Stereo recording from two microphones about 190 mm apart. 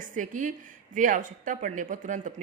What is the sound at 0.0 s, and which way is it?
A woman's voice, 45° right (ahead or behind).